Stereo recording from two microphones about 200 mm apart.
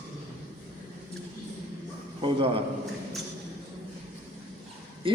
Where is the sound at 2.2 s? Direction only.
25° right (ahead or behind).